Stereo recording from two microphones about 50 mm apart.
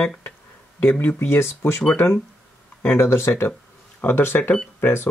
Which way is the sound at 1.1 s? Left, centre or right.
Left.